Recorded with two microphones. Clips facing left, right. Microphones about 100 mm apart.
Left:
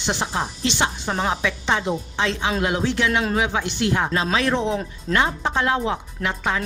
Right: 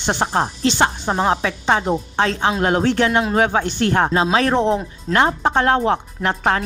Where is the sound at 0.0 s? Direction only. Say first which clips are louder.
Right 5 dB; 55° right (ahead or behind).